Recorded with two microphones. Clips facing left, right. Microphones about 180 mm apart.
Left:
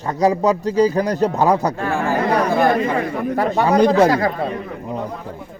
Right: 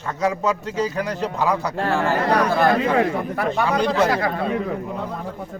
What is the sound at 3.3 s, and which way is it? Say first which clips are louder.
Speech: left 5 dB; 35° left (ahead or behind).